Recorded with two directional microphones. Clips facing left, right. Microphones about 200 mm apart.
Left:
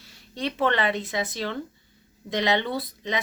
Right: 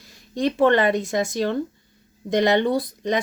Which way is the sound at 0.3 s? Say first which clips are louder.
Right 7 dB; 45° right (ahead or behind).